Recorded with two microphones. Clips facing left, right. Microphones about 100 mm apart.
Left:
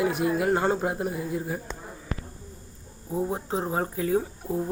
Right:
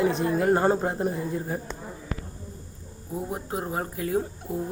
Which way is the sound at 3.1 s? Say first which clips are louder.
Left 3 dB; 25° left (ahead or behind).